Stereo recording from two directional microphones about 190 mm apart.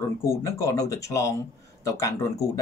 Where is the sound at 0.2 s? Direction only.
15° left (ahead or behind).